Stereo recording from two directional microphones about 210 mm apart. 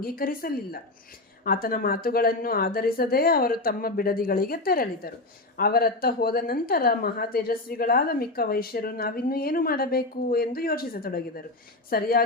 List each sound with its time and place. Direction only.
0.0 s a woman's voice: 45° left (ahead or behind)